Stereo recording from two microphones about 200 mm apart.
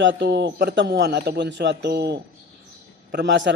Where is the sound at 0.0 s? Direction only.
60° right (ahead or behind).